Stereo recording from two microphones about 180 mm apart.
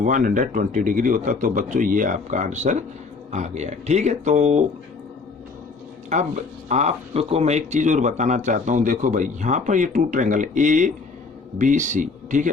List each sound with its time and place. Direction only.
0.0 s speech: 50° right (ahead or behind)
6.1 s speech: 40° right (ahead or behind)